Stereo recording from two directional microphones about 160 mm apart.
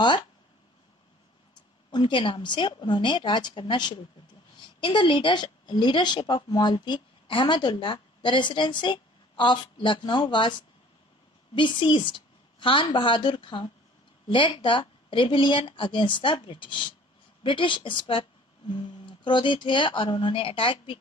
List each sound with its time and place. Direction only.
1.9 s a woman's voice: 30° left (ahead or behind)